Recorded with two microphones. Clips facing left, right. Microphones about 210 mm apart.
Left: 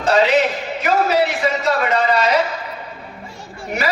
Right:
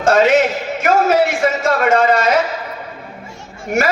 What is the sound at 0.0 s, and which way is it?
A man's voice, 50° right (ahead or behind).